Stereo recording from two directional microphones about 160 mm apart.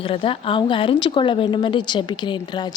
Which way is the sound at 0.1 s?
35° left (ahead or behind).